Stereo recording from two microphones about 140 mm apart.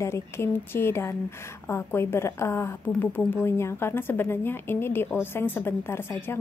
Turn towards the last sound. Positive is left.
turn(degrees=15)  # may be behind; listen again after turning